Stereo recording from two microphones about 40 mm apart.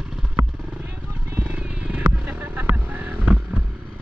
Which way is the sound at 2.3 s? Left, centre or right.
Right.